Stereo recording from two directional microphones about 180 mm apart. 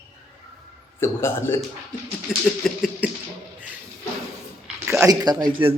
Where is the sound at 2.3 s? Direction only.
5° right (ahead or behind).